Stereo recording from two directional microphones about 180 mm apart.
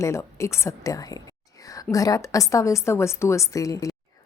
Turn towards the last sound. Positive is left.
turn(degrees=20)  # may be behind; listen again after turning